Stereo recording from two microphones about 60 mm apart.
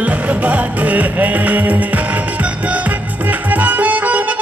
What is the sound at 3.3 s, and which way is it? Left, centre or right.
Music, right.